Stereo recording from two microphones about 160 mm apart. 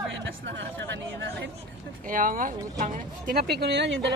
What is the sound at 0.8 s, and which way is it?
Speech, 90° right.